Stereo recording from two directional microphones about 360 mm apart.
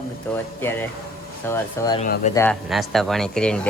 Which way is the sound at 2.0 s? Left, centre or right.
Left.